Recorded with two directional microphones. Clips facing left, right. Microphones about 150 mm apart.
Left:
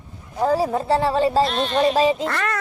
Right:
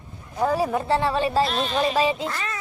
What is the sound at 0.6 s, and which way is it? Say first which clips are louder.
Speech: left 2 dB; 35° left (ahead or behind).